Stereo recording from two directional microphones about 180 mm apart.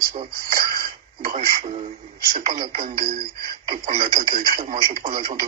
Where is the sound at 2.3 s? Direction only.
50° right (ahead or behind).